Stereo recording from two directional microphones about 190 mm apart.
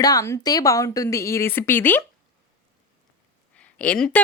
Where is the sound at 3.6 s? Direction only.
5° left (ahead or behind).